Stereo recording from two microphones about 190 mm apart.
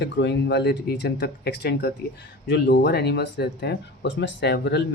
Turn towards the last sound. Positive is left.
turn(degrees=65)  # may be behind; listen again after turning